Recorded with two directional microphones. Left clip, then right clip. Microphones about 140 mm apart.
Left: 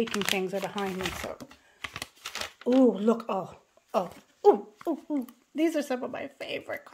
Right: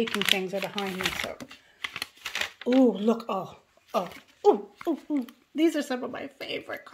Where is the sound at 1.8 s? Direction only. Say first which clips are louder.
Right 4 dB; 90° left.